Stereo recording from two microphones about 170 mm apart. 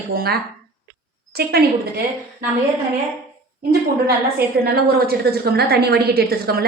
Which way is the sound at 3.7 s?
65° right (ahead or behind).